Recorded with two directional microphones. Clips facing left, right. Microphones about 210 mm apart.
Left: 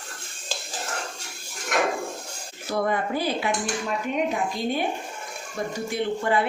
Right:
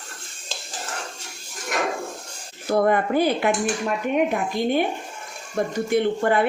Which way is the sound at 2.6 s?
55° right (ahead or behind).